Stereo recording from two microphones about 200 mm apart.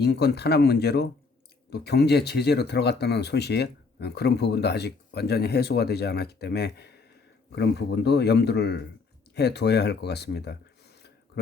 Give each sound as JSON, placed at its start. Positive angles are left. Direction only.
{"t": 0.0, "sound": "speech", "side_deg": 55}